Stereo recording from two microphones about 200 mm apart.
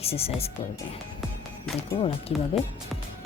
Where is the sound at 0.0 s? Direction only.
30° left (ahead or behind).